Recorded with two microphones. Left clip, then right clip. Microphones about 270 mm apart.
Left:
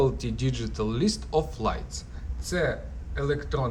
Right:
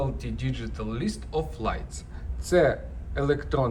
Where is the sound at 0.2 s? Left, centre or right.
Centre.